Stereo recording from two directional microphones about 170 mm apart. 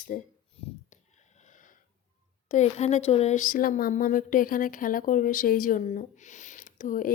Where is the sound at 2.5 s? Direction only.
40° left (ahead or behind).